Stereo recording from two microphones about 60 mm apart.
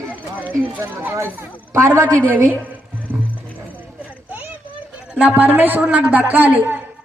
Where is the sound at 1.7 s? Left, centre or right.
Right.